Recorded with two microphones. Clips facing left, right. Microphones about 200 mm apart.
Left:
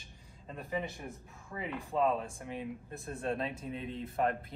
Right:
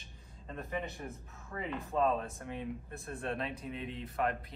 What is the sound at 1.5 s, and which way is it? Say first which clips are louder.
Speech: even; 10° left (ahead or behind).